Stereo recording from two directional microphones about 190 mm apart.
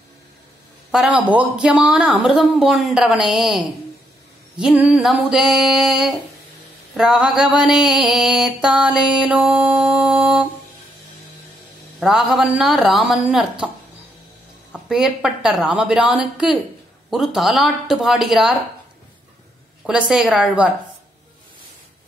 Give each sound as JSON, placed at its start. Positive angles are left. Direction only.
{"t": 0.9, "sound": "mantra", "side_deg": -5}
{"t": 12.0, "sound": "mantra", "side_deg": 0}
{"t": 14.7, "sound": "mantra", "side_deg": -5}
{"t": 19.9, "sound": "mantra", "side_deg": -5}